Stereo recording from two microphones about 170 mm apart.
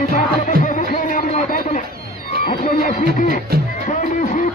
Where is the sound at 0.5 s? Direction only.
50° left (ahead or behind).